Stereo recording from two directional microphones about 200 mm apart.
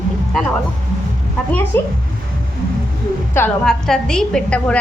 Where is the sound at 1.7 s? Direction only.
10° left (ahead or behind).